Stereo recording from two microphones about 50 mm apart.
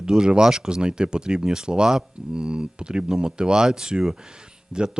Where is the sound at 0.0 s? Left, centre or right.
Centre.